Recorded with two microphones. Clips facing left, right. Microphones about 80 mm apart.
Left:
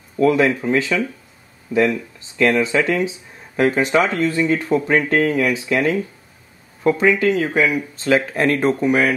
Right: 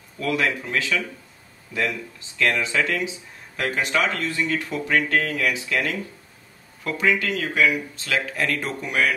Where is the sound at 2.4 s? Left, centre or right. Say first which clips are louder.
Left 6 dB; left.